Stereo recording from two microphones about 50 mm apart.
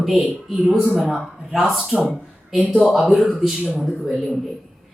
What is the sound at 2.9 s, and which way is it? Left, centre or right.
Speech, centre.